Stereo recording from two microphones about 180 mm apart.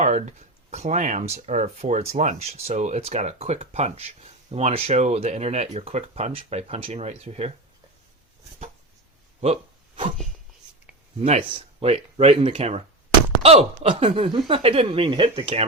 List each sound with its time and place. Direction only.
0.0 s speech: 40° right (ahead or behind)
9.4 s a sound: 35° right (ahead or behind)
11.2 s speech: 35° right (ahead or behind)